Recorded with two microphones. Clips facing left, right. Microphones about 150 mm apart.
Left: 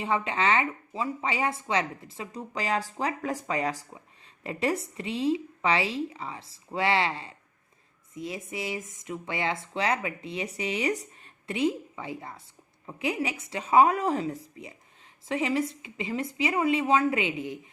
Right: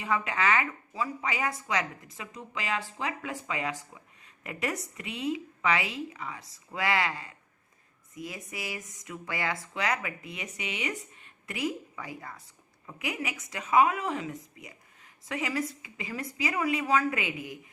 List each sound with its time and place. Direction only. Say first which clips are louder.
0.0 s a woman's voice: left 2 dB; 25° left (ahead or behind)